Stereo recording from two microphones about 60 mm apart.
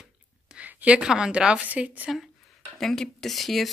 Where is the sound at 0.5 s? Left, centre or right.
Right.